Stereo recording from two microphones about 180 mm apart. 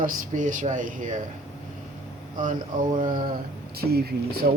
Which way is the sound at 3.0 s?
25° right (ahead or behind).